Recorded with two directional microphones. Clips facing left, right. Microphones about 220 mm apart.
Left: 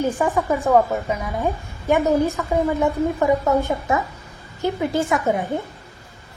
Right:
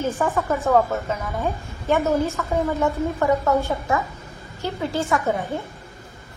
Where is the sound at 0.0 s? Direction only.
15° left (ahead or behind).